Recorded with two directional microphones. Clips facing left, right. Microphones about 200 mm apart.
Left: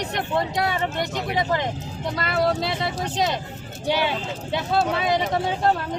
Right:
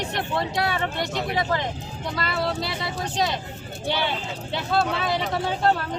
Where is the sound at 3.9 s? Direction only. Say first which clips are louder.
Left 3 dB; 10° left (ahead or behind).